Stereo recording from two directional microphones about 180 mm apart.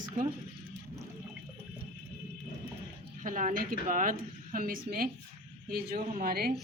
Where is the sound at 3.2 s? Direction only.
45° right (ahead or behind).